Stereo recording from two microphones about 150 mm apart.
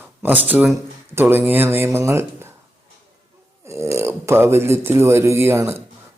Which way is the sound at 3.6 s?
20° right (ahead or behind).